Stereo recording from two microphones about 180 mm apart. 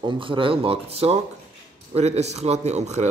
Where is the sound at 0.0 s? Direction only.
25° right (ahead or behind).